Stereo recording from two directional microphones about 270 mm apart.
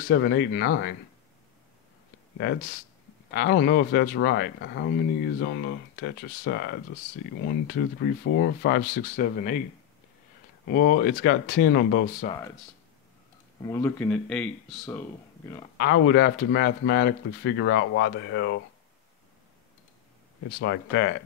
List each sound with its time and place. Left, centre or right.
0.1 s speech: left
3.3 s speech: left
8.4 s speech: left
10.7 s speech: left
13.7 s speech: centre
15.8 s speech: left
20.6 s speech: left